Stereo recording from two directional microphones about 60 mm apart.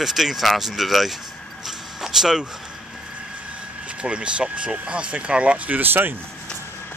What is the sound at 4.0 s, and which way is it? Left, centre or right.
Speech, centre.